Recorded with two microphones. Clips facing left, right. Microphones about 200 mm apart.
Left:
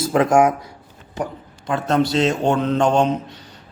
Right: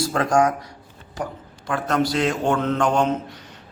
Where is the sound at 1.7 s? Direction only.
25° left (ahead or behind).